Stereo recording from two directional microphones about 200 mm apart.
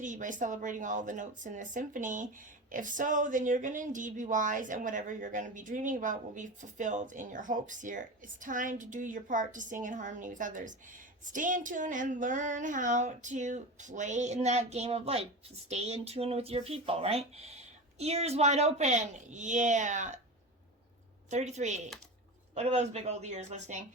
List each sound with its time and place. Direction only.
0.0 s a woman's voice: 40° right (ahead or behind)
21.2 s a woman's voice: 35° right (ahead or behind)